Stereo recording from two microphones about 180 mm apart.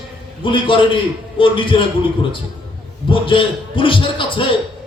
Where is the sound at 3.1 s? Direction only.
30° left (ahead or behind).